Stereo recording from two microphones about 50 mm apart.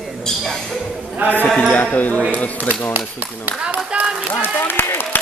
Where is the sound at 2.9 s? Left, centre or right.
Right.